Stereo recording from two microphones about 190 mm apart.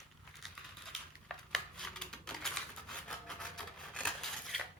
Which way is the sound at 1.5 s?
5° left (ahead or behind).